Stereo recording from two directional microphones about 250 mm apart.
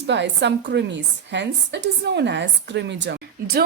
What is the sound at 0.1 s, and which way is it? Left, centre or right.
A woman's voice, right.